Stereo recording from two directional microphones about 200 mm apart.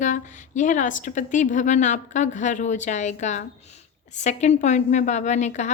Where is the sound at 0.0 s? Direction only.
40° left (ahead or behind).